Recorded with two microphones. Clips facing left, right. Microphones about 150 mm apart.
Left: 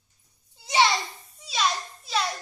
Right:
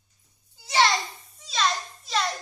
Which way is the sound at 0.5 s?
20° left (ahead or behind).